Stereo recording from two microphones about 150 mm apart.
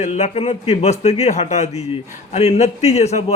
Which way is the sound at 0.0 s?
50° left (ahead or behind).